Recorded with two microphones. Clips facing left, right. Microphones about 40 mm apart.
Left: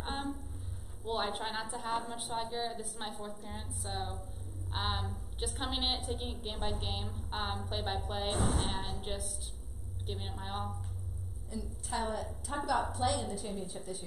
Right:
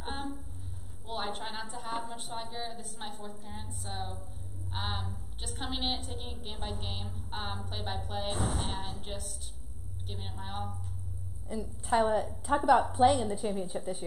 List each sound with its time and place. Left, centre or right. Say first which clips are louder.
0.0 s a sound: even; centre
1.0 s a woman's voice: left 2 dB; centre
11.4 s a woman's voice: right 5 dB; right